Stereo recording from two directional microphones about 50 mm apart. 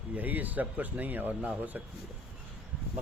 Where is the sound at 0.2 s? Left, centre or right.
Right.